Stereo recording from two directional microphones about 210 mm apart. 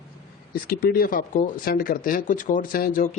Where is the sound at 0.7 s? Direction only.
45° left (ahead or behind).